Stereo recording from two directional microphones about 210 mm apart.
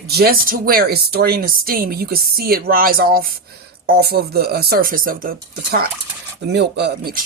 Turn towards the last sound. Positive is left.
turn(degrees=-50)  # may be behind; listen again after turning